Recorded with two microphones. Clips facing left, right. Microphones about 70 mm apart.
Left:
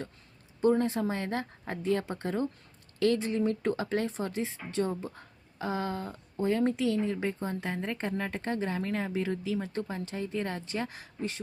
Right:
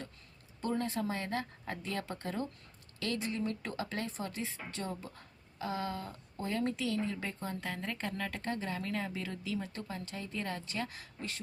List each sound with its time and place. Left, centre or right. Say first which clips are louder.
0.6 s speech: left 9 dB; left